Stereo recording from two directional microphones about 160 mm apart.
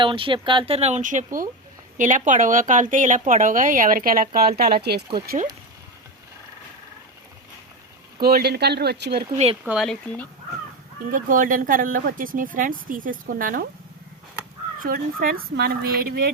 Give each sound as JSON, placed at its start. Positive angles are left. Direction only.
{"t": 0.0, "sound": "speech", "side_deg": -30}
{"t": 4.4, "sound": "speech", "side_deg": -75}
{"t": 8.2, "sound": "speech", "side_deg": -75}
{"t": 9.6, "sound": "speech", "side_deg": 0}
{"t": 11.1, "sound": "speech", "side_deg": -55}
{"t": 14.8, "sound": "speech", "side_deg": -65}